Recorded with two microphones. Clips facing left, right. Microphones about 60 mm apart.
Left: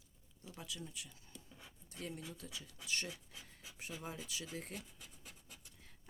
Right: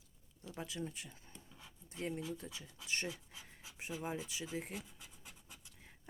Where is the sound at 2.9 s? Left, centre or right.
Right.